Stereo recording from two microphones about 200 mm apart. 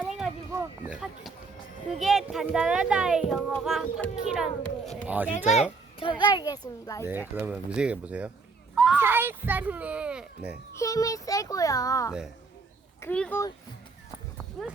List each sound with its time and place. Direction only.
0.0 s a sound: 5° right (ahead or behind)
2.0 s speech: centre (ahead or behind)
6.0 s a child's voice: 25° left (ahead or behind)
7.0 s a child's voice: 10° right (ahead or behind)
10.8 s a child's voice: 15° left (ahead or behind)
14.6 s speech: centre (ahead or behind)